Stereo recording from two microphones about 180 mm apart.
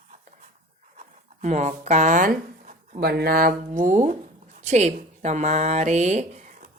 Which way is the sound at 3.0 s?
60° right (ahead or behind).